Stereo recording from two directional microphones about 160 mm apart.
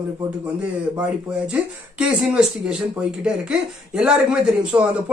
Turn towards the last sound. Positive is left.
turn(degrees=-5)  # may be behind; listen again after turning